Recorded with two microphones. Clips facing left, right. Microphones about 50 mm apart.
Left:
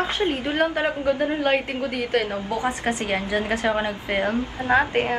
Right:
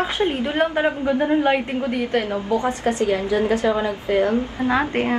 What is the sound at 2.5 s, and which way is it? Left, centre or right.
Speech, left.